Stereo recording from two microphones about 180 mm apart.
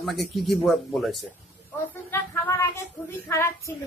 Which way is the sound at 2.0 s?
15° left (ahead or behind).